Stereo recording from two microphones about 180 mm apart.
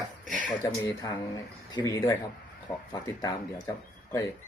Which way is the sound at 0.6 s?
20° left (ahead or behind).